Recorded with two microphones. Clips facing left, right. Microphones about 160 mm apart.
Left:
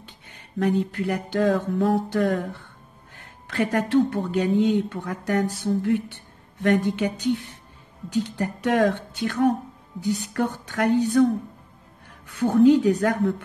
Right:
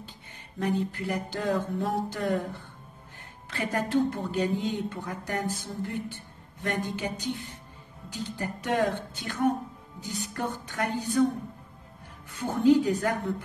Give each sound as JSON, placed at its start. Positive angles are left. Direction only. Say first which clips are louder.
{"t": 0.6, "sound": "a woman's voice", "louder": "left 6 dB", "side_deg": 65}
{"t": 3.4, "sound": "a woman's voice", "louder": "left 6 dB", "side_deg": 75}
{"t": 12.4, "sound": "a woman's voice", "louder": "left 5 dB", "side_deg": 65}